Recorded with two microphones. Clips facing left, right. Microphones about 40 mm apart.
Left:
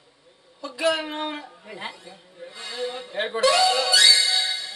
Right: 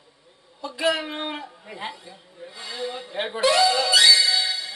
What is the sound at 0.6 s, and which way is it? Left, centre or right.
A woman's voice, centre.